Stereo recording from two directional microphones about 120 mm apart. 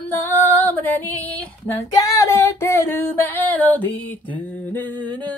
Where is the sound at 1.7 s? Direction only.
30° left (ahead or behind).